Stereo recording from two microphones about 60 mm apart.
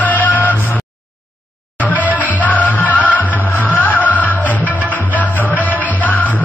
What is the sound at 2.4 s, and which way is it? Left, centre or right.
Music, left.